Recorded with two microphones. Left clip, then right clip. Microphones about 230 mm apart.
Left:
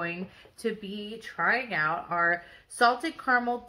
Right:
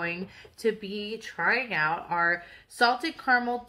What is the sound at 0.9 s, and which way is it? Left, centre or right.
A woman's voice, centre.